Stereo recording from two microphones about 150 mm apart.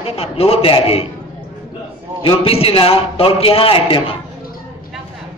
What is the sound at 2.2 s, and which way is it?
A man's voice, 40° left (ahead or behind).